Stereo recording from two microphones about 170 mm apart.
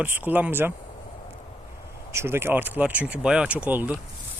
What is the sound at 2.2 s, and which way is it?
Speech, 15° right (ahead or behind).